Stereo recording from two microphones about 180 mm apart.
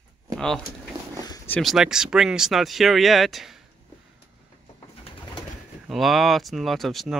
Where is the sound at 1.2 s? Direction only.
20° left (ahead or behind).